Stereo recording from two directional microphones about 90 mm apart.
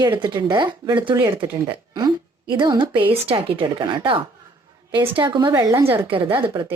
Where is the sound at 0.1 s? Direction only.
60° right (ahead or behind).